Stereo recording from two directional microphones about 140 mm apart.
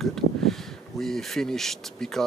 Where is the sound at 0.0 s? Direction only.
Centre (ahead or behind).